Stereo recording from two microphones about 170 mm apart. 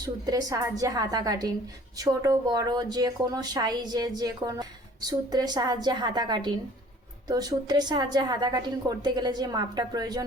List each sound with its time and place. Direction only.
0.0 s a woman's voice: 20° right (ahead or behind)